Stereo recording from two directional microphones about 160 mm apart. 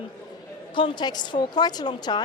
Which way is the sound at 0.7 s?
30° left (ahead or behind).